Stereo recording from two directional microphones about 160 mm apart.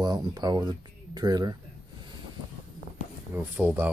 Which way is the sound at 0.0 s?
25° right (ahead or behind).